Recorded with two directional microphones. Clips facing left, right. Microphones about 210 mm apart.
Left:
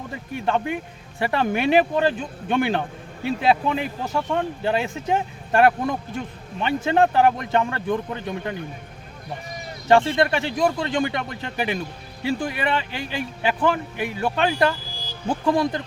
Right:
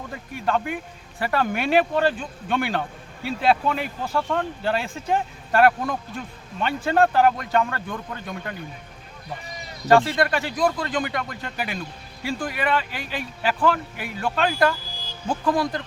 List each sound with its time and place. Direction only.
0.4 s speech: 25° left (ahead or behind)
9.9 s speech: 25° left (ahead or behind)